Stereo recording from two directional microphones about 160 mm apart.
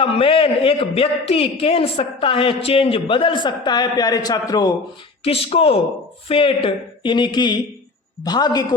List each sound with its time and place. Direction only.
0.0 s a man's voice: 35° left (ahead or behind)
5.2 s a man's voice: 35° left (ahead or behind)